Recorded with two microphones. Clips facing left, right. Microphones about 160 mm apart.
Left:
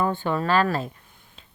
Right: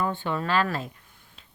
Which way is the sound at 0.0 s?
45° left (ahead or behind).